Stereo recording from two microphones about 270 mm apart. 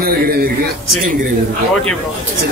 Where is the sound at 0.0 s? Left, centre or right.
Right.